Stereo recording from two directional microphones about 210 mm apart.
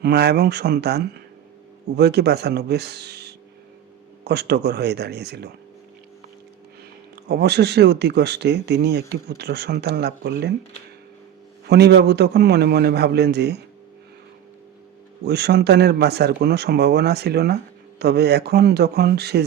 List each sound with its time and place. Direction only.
0.0 s speech: 50° right (ahead or behind)
7.3 s speech: 50° right (ahead or behind)
11.6 s speech: 50° right (ahead or behind)
15.2 s speech: 50° right (ahead or behind)